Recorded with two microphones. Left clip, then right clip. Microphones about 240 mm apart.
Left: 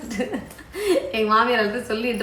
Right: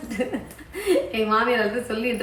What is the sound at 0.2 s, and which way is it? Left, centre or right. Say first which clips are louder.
A woman's voice: right 1 dB; centre.